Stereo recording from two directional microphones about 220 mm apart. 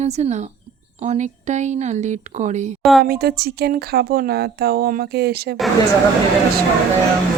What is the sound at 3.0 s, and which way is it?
Speech, 45° right (ahead or behind).